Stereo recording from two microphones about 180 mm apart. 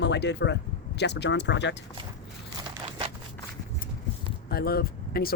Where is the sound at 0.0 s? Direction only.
70° left (ahead or behind).